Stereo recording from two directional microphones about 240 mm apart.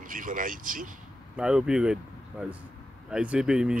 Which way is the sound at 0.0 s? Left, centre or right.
Right.